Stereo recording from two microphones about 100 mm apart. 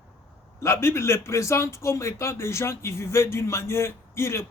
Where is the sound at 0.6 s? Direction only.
25° left (ahead or behind).